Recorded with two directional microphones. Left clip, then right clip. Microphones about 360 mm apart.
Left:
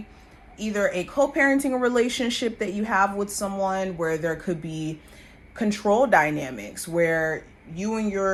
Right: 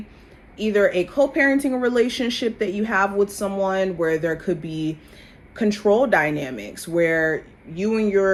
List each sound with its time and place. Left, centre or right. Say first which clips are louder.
0.5 s speech: right 6 dB; centre
1.1 s speech: right 2 dB; left
3.2 s speech: right 5 dB; centre